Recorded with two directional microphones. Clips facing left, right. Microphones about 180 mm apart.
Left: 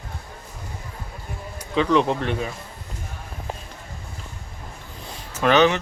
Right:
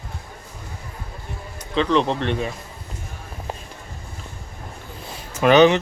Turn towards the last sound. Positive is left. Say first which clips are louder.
# right 4 dB
turn(degrees=-15)  # may be behind; listen again after turning